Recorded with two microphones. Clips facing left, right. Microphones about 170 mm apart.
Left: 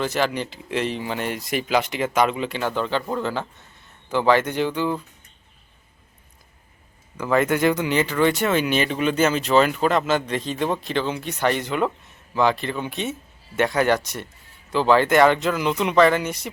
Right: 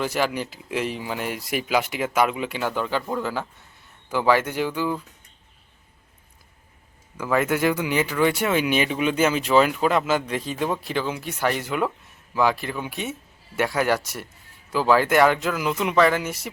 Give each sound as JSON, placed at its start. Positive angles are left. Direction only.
{"t": 0.0, "sound": "speech", "side_deg": -10}
{"t": 7.2, "sound": "speech", "side_deg": -5}